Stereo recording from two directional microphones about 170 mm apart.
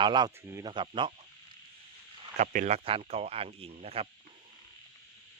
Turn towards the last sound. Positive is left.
turn(degrees=-35)  # may be behind; listen again after turning